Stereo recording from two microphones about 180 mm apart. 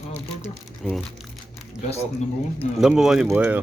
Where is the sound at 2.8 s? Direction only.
Centre (ahead or behind).